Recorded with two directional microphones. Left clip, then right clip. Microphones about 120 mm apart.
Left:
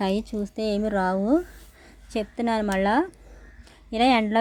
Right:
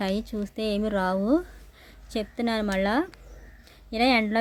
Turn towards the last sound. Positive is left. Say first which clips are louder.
# left 2 dB
turn(degrees=10)  # may be behind; listen again after turning